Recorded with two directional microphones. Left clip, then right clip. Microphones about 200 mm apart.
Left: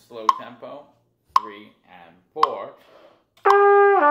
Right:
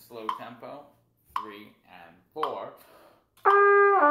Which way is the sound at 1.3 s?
60° left (ahead or behind).